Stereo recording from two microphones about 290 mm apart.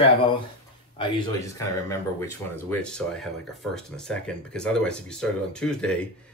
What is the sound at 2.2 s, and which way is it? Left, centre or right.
Speech, centre.